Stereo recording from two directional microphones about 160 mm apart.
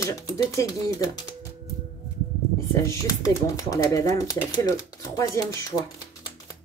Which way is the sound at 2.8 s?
20° left (ahead or behind).